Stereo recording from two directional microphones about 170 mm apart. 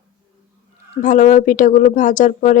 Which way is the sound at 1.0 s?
50° left (ahead or behind).